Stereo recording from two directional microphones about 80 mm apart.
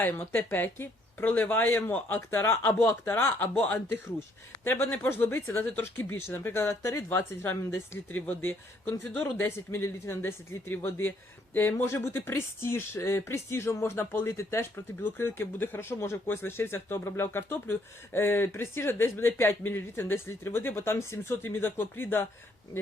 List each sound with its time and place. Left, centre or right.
0.0 s speech: left